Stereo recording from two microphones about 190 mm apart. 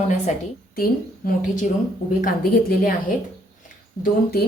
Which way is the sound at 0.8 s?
50° left (ahead or behind).